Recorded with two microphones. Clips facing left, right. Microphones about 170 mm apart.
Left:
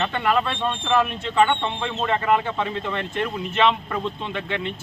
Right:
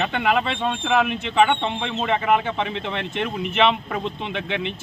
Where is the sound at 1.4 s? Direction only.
20° right (ahead or behind).